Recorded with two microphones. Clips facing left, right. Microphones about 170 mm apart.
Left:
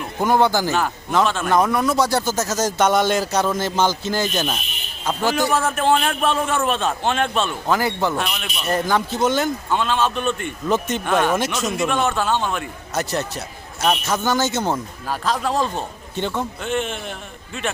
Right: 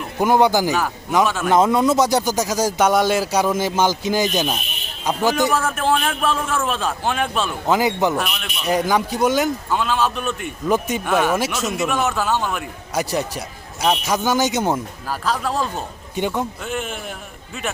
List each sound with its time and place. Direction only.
0.2 s a man's voice: 15° right (ahead or behind)
1.5 s a man's voice: 20° right (ahead or behind)
5.5 s a man's voice: centre (ahead or behind)
7.7 s a man's voice: 15° right (ahead or behind)
16.1 s a man's voice: 15° right (ahead or behind)